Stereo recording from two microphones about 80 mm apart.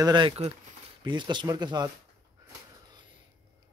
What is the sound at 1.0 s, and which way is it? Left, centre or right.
Speech, right.